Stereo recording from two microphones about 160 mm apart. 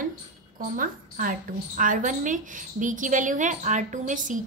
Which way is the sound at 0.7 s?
60° right (ahead or behind).